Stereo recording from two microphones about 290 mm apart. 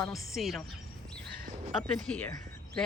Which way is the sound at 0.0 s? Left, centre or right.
Centre.